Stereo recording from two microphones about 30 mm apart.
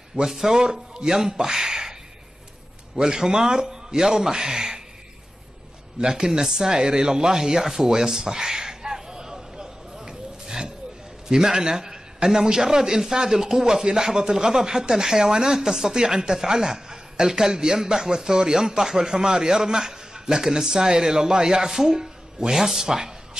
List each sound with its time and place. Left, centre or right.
0.3 s speech: centre
3.0 s speech: centre
5.9 s speech: right
8.5 s a sound: centre
11.2 s a man's voice: centre